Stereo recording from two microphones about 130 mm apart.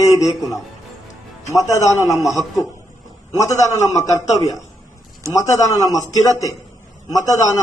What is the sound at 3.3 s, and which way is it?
A man's voice, 25° left (ahead or behind).